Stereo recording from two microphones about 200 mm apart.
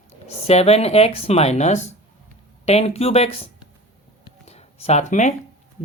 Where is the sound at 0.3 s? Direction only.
30° left (ahead or behind).